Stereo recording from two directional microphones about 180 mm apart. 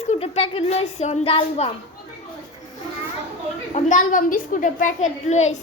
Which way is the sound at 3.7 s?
45° left (ahead or behind).